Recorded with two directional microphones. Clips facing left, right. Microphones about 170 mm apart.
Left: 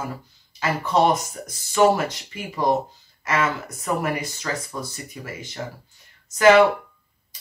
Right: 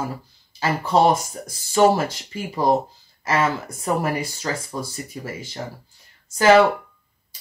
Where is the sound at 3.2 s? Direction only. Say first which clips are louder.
Right 2 dB; 30° right (ahead or behind).